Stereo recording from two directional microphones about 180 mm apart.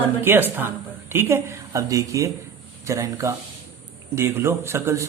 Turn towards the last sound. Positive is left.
turn(degrees=-15)  # may be behind; listen again after turning